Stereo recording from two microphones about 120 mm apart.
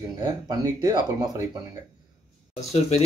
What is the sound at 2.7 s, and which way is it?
Speech, 65° left (ahead or behind).